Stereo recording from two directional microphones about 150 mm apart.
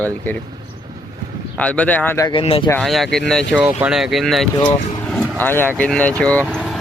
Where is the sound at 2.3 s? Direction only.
35° left (ahead or behind).